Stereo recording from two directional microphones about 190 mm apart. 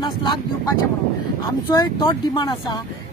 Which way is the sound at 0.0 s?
25° left (ahead or behind).